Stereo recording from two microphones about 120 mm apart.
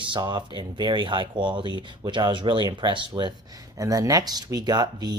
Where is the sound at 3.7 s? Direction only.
30° right (ahead or behind).